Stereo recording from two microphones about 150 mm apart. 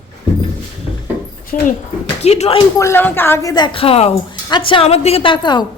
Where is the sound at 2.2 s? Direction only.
45° left (ahead or behind).